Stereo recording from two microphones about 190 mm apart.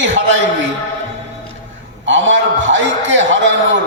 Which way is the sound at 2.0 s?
75° right (ahead or behind).